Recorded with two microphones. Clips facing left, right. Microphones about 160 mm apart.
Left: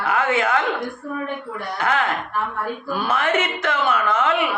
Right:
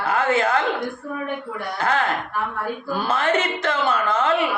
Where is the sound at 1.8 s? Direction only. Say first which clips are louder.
Even; 35° right (ahead or behind).